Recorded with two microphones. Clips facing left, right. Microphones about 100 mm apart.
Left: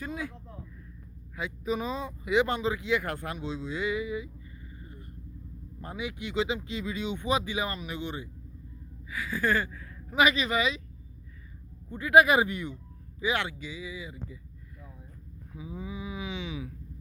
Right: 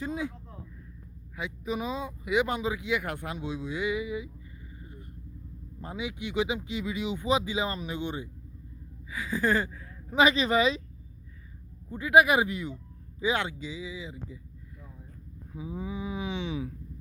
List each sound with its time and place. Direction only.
0.0 s speech: 20° right (ahead or behind)
1.6 s speech: 10° right (ahead or behind)
5.8 s speech: 15° right (ahead or behind); by 10.8 s 35° right (ahead or behind)
11.9 s speech: 15° right (ahead or behind)
13.1 s speech: 20° right (ahead or behind)
15.5 s livestock: 25° right (ahead or behind)